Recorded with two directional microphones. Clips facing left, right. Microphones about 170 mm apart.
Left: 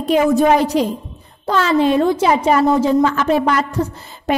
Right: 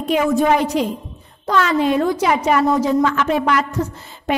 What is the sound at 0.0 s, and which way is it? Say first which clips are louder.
A woman's voice: left 3 dB; 35° left (ahead or behind).